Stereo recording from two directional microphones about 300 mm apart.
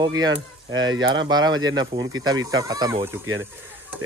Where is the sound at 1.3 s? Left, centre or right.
Centre.